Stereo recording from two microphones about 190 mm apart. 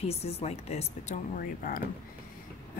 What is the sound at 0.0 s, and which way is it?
Speech, 35° left (ahead or behind).